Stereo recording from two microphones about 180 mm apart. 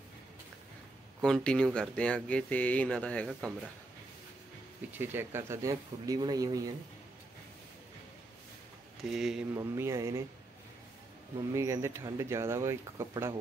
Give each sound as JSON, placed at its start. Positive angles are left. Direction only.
{"t": 1.2, "sound": "speech", "side_deg": 5}
{"t": 4.9, "sound": "speech", "side_deg": -10}
{"t": 9.1, "sound": "speech", "side_deg": -5}
{"t": 9.5, "sound": "speech", "side_deg": -15}
{"t": 11.5, "sound": "speech", "side_deg": -15}